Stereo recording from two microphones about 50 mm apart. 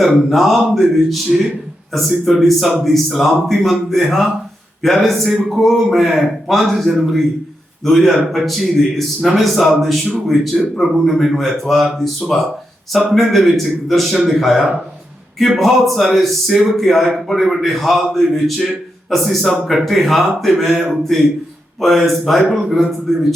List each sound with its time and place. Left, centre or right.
0.0 s speech: centre